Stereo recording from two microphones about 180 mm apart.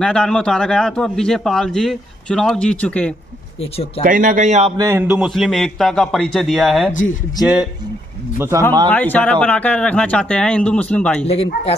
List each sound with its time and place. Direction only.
0.0 s a man's voice: 5° left (ahead or behind)
4.0 s speech: 50° right (ahead or behind)
4.7 s a man's voice: 15° right (ahead or behind)
5.0 s a man's voice: 5° right (ahead or behind)
6.9 s speech: 45° left (ahead or behind)
8.8 s speech: 10° left (ahead or behind)
11.2 s speech: 35° left (ahead or behind)